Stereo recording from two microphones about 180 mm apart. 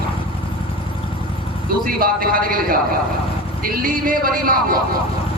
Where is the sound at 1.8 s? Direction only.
55° right (ahead or behind).